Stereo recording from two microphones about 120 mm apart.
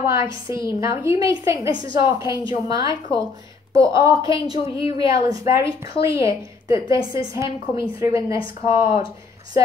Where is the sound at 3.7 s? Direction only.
25° right (ahead or behind).